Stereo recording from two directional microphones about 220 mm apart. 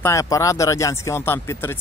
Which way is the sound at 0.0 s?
15° left (ahead or behind).